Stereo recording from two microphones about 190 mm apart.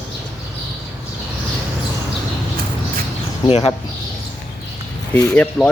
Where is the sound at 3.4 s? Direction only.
35° left (ahead or behind).